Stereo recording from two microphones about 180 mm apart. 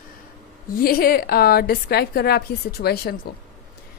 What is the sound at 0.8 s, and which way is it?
A woman's voice, 55° left (ahead or behind).